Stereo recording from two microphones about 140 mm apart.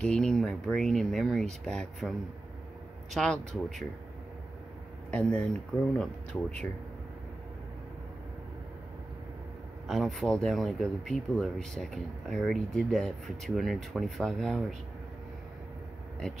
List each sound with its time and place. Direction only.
0.0 s speech: 5° left (ahead or behind)
3.2 s speech: 5° left (ahead or behind)
5.1 s speech: 5° left (ahead or behind)
9.8 s speech: centre (ahead or behind)